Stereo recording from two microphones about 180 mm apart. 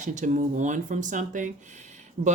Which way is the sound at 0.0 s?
40° right (ahead or behind).